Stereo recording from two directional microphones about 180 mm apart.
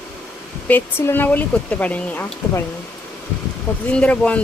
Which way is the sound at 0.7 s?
10° left (ahead or behind).